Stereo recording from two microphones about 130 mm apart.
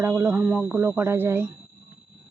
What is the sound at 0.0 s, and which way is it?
Speech, 15° right (ahead or behind).